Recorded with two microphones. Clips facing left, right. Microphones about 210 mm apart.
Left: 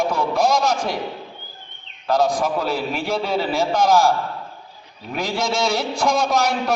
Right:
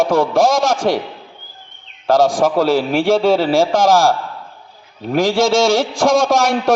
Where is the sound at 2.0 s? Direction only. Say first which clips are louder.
Right 6 dB; 90° right.